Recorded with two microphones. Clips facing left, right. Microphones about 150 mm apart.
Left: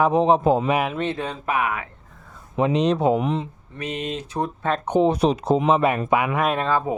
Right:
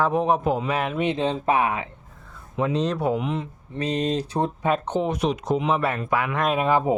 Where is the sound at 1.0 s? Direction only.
20° right (ahead or behind).